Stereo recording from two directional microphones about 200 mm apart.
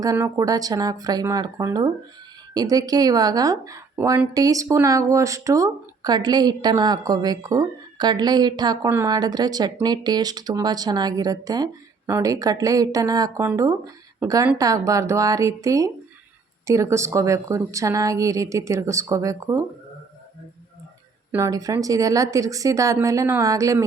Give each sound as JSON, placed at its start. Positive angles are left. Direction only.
{"t": 0.0, "sound": "speech", "side_deg": -15}
{"t": 21.3, "sound": "speech", "side_deg": -15}